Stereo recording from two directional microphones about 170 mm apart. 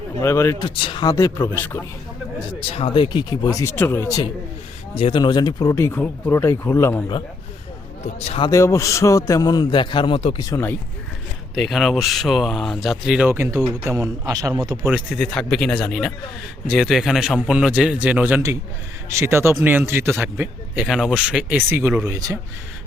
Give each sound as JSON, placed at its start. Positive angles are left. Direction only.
{"t": 0.2, "sound": "speech", "side_deg": 15}
{"t": 0.8, "sound": "a man's voice", "side_deg": 30}
{"t": 1.1, "sound": "speech", "side_deg": 15}
{"t": 2.6, "sound": "a man's voice", "side_deg": 35}
{"t": 4.9, "sound": "speech", "side_deg": 30}
{"t": 8.0, "sound": "a man's voice", "side_deg": 40}
{"t": 8.4, "sound": "a man's voice", "side_deg": 20}
{"t": 10.5, "sound": "speech", "side_deg": 15}
{"t": 11.5, "sound": "a man's voice", "side_deg": 0}
{"t": 14.8, "sound": "speech", "side_deg": -5}